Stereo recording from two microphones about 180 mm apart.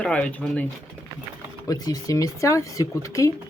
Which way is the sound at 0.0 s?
5° left (ahead or behind).